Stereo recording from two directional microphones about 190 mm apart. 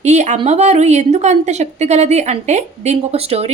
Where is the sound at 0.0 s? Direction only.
35° right (ahead or behind).